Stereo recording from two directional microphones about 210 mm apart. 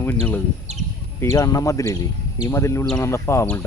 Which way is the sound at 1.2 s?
15° left (ahead or behind).